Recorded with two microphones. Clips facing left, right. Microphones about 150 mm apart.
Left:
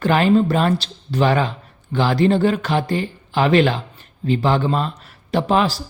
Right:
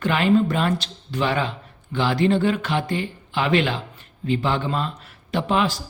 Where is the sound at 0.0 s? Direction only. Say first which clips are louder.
Left 3 dB; 40° left (ahead or behind).